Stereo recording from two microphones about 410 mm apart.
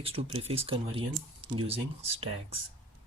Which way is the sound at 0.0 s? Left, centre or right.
Centre.